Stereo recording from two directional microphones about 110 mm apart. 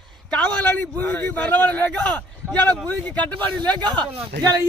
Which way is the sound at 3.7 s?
40° right (ahead or behind).